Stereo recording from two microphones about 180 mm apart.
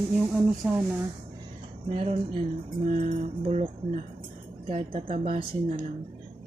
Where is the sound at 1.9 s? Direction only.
35° right (ahead or behind).